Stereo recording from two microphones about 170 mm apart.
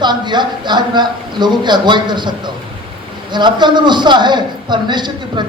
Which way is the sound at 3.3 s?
25° right (ahead or behind).